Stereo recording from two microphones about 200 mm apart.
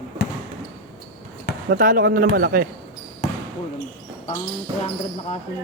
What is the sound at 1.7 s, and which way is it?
Speech, 45° right (ahead or behind).